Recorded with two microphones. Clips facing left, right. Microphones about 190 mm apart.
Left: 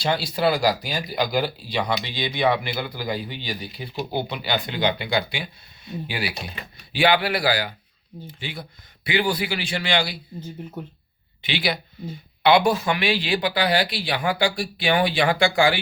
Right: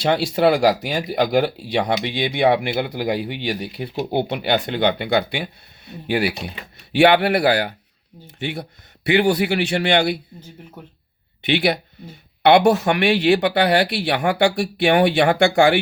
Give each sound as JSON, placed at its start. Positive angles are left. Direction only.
{"t": 0.0, "sound": "speech", "side_deg": -70}
{"t": 11.4, "sound": "speech", "side_deg": -65}